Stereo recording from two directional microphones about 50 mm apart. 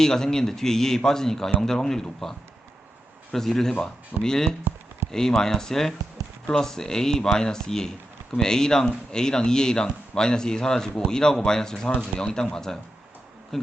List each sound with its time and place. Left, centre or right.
0.0 s a man's voice: centre
3.3 s a man's voice: centre
13.5 s bee: centre